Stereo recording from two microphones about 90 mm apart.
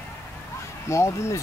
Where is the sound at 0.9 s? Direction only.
35° left (ahead or behind).